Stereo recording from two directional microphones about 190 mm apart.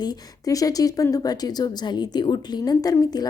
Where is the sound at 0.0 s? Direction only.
20° left (ahead or behind).